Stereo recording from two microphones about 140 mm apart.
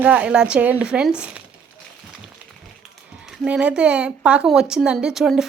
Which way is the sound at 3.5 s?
5° right (ahead or behind).